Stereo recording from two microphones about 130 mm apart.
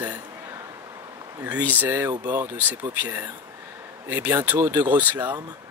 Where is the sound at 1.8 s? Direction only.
15° right (ahead or behind).